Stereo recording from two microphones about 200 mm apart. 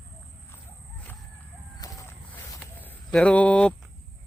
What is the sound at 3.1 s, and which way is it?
Speech, 5° left (ahead or behind).